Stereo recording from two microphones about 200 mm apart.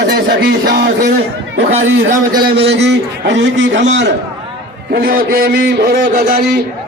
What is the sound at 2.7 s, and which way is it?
A man's voice, 60° right (ahead or behind).